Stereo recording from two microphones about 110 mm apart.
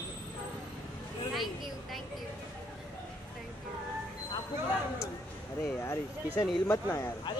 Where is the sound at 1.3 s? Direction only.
Centre (ahead or behind).